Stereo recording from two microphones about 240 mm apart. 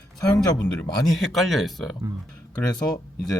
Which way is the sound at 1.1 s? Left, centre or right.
Centre.